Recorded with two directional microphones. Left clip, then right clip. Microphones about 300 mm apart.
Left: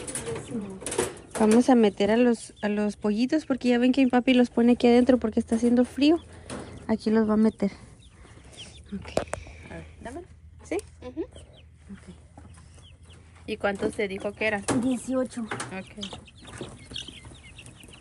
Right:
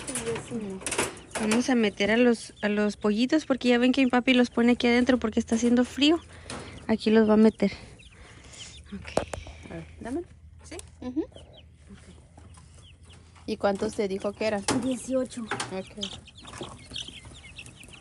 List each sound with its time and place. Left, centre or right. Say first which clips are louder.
0.0 s bird: right 2 dB; centre
2.1 s speech: even; centre
6.6 s door: right 1 dB; centre
7.2 s speech: right 4 dB; centre
8.5 s whispering: left 2 dB; centre
13.5 s speech: right 1 dB; centre
14.6 s speech: left 1 dB; centre
16.0 s bird: right 2 dB; centre